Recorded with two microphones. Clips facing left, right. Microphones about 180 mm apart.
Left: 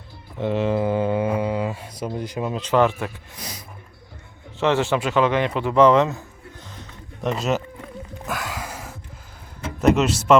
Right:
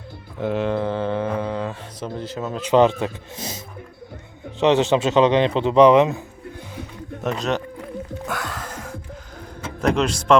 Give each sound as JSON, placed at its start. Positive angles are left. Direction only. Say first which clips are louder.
{"t": 0.3, "sound": "a sound", "louder": "left 1 dB", "side_deg": 0}
{"t": 2.7, "sound": "a man's voice", "louder": "right 4 dB", "side_deg": -20}
{"t": 4.6, "sound": "a man's voice", "louder": "right 3 dB", "side_deg": -20}
{"t": 6.7, "sound": "a sound", "louder": "right 6 dB", "side_deg": 0}
{"t": 8.3, "sound": "music", "louder": "left 3 dB", "side_deg": 5}
{"t": 9.8, "sound": "a man's voice", "louder": "left 2 dB", "side_deg": 5}